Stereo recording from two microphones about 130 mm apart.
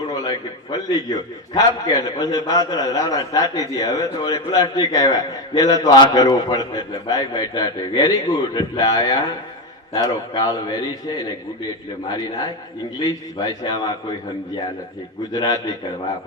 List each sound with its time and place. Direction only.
0.1 s a man's voice: 30° left (ahead or behind)
15.3 s a man's voice: 30° left (ahead or behind)